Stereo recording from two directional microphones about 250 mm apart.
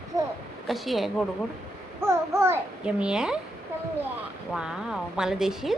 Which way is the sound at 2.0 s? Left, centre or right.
Centre.